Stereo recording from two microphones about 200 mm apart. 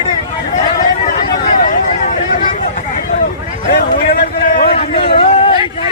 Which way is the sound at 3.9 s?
45° left (ahead or behind).